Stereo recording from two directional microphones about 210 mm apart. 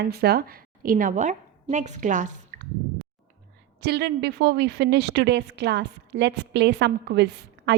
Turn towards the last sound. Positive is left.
turn(degrees=-55)  # may be behind; listen again after turning